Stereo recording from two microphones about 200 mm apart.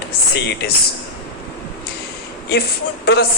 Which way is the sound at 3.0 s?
55° left (ahead or behind).